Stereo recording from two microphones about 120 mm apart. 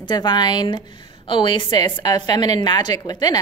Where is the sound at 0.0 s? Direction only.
35° left (ahead or behind).